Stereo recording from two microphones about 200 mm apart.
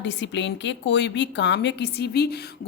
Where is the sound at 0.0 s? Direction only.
60° left (ahead or behind).